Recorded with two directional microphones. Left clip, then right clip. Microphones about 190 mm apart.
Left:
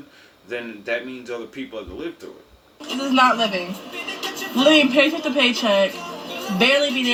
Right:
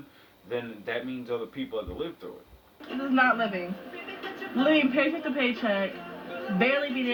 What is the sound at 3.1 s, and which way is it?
Speech, 65° left (ahead or behind).